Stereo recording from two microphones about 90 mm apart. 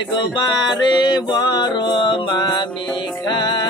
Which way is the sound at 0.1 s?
55° left (ahead or behind).